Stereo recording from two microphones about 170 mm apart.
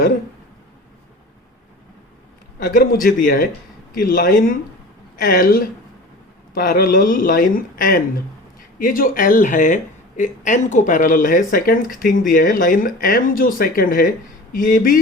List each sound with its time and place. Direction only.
2.6 s speech: 60° left (ahead or behind)